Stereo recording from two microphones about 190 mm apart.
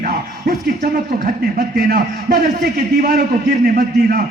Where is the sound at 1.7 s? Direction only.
55° right (ahead or behind).